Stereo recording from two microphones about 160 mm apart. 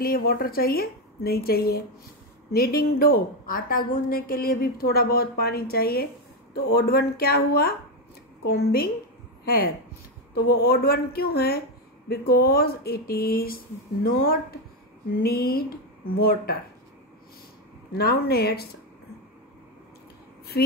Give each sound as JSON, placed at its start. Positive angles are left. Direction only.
{"t": 0.0, "sound": "a woman's voice", "side_deg": 70}
{"t": 17.9, "sound": "a woman's voice", "side_deg": 80}